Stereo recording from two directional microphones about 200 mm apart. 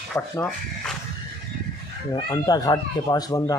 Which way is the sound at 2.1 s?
20° left (ahead or behind).